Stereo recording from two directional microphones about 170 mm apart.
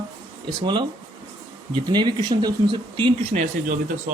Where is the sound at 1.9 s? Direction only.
25° right (ahead or behind).